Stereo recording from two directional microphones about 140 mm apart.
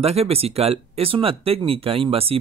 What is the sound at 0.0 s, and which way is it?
Speech, 45° right (ahead or behind).